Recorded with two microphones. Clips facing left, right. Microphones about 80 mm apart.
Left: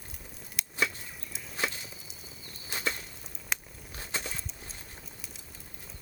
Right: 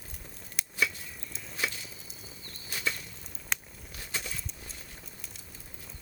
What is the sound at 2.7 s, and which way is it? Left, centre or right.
Bird flight, left.